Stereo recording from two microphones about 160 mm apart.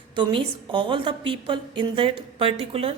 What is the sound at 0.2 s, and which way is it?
A woman's voice, 30° right (ahead or behind).